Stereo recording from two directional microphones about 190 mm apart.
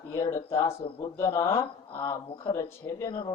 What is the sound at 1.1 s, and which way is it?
Speech, 15° left (ahead or behind).